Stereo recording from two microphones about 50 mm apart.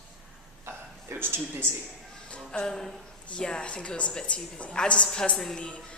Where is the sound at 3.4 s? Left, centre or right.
Centre.